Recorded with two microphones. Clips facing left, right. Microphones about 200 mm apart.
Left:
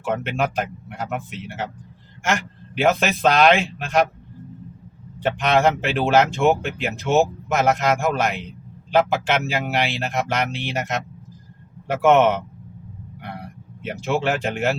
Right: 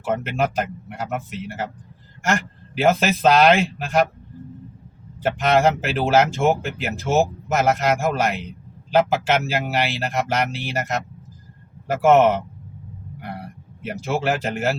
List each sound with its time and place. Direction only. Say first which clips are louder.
0.0 s speech: right 1 dB; centre (ahead or behind)
5.2 s speech: right 1 dB; centre (ahead or behind)
12.0 s speech: right 1 dB; centre (ahead or behind)
13.8 s speech: even; centre (ahead or behind)